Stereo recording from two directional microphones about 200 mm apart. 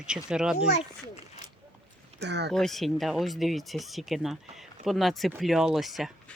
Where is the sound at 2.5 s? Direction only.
Centre (ahead or behind).